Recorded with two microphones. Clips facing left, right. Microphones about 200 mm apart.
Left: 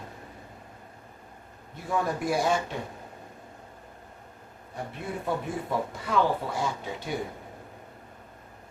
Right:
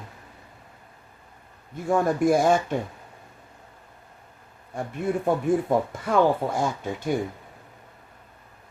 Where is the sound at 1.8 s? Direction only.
50° right (ahead or behind).